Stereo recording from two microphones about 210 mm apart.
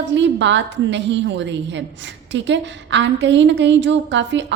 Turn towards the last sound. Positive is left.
turn(degrees=-60)  # may be behind; listen again after turning